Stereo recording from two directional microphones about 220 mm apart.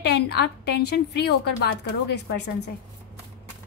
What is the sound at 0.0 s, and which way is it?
A woman's voice, 50° left (ahead or behind).